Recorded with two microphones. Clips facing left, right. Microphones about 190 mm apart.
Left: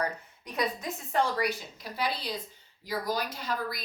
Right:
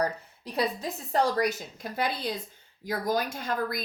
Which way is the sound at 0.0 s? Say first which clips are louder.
Right 4 dB; 30° right (ahead or behind).